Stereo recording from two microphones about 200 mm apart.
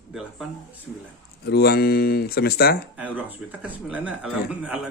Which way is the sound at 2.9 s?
5° right (ahead or behind).